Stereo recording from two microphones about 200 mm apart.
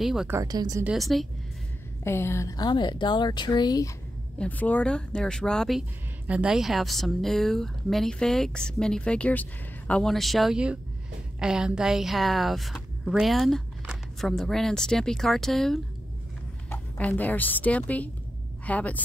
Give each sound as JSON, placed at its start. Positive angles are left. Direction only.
{"t": 0.0, "sound": "speech", "side_deg": 0}
{"t": 0.4, "sound": "speech", "side_deg": -20}
{"t": 0.8, "sound": "speech", "side_deg": 0}
{"t": 2.0, "sound": "speech", "side_deg": 15}
{"t": 4.4, "sound": "speech", "side_deg": 5}